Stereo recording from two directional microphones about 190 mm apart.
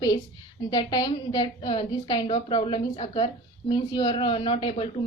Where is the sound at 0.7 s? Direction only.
25° left (ahead or behind).